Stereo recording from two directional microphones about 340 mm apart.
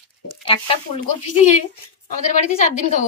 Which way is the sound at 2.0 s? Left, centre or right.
Left.